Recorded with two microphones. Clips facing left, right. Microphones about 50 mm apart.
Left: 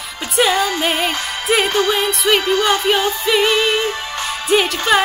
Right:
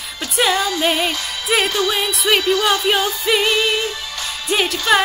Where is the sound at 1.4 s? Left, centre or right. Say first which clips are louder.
Left 2 dB; centre.